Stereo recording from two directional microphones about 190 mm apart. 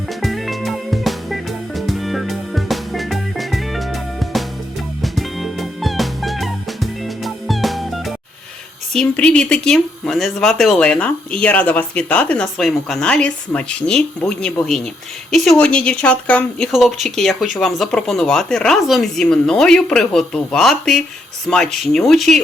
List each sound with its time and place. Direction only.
0.1 s music: centre (ahead or behind)
8.9 s speech: 5° left (ahead or behind)